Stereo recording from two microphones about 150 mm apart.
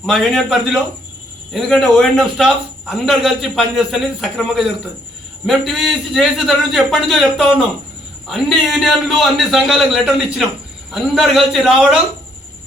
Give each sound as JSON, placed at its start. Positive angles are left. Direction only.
{"t": 0.0, "sound": "a man's voice", "side_deg": 0}